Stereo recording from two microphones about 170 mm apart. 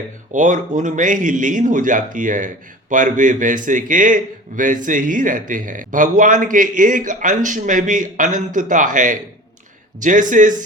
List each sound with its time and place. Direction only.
0.3 s a man's voice: 50° right (ahead or behind)